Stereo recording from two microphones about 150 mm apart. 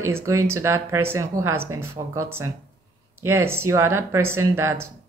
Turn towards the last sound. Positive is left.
turn(degrees=-15)  # may be behind; listen again after turning